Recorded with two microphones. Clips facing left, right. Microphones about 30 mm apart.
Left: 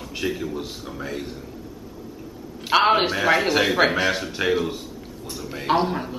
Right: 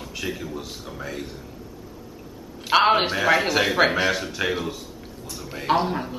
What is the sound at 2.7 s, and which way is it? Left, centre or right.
A man's voice, centre.